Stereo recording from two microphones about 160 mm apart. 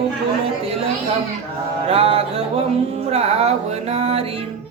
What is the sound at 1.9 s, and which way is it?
Music, 35° right (ahead or behind).